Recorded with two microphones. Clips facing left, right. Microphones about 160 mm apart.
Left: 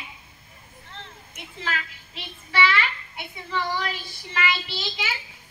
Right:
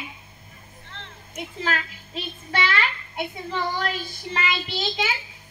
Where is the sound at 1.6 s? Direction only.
45° right (ahead or behind).